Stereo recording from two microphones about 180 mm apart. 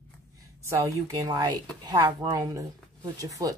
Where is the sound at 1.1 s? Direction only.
20° right (ahead or behind).